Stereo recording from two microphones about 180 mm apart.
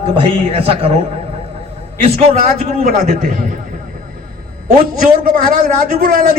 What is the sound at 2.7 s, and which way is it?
Speech, 40° right (ahead or behind).